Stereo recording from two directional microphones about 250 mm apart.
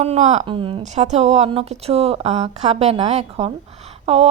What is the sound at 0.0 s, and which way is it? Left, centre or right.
A woman's voice, right.